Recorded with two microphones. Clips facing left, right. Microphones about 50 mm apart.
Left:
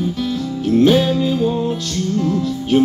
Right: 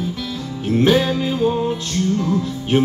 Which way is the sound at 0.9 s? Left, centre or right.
Centre.